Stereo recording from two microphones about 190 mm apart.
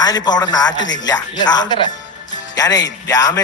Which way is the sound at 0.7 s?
75° left (ahead or behind).